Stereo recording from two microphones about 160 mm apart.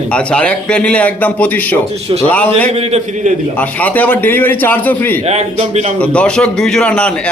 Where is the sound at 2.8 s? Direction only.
40° right (ahead or behind).